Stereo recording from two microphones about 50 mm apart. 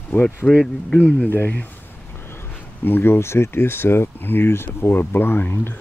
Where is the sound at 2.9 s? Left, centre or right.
Left.